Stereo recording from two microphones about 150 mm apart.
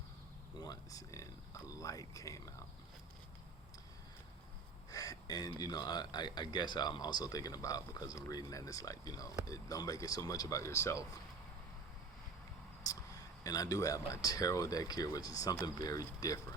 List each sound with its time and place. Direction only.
0.6 s speech: 25° left (ahead or behind)
4.9 s speech: 25° left (ahead or behind)
12.9 s vehicle: 25° left (ahead or behind)
13.4 s speech: 25° left (ahead or behind)